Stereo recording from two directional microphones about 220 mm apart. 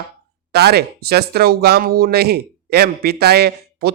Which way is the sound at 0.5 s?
45° right (ahead or behind).